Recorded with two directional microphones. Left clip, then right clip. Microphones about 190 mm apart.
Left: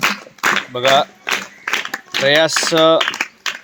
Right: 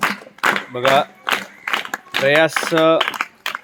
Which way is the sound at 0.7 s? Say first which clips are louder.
Left 2 dB; 15° left (ahead or behind).